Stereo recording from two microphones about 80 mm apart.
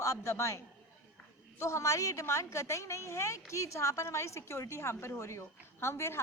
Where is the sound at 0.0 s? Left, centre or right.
Left.